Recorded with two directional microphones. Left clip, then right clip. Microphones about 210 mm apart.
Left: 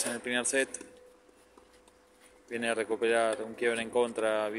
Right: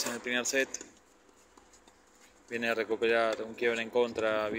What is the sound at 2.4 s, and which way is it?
Speech, 5° left (ahead or behind).